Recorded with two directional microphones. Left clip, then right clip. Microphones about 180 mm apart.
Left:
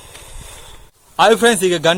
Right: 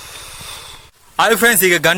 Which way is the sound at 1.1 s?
Centre (ahead or behind).